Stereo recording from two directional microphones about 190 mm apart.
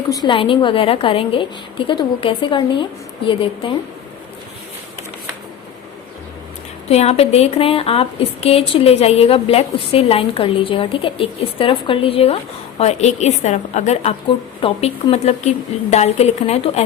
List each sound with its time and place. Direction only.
0.1 s a woman's voice: 25° left (ahead or behind)
6.8 s a woman's voice: 35° left (ahead or behind)